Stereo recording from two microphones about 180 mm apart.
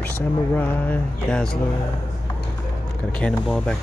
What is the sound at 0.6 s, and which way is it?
Speech, 10° left (ahead or behind).